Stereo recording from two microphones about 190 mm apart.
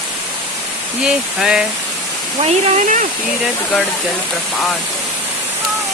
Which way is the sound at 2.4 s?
35° right (ahead or behind).